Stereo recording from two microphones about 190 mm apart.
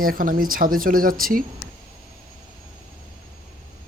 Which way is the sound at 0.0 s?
50° right (ahead or behind).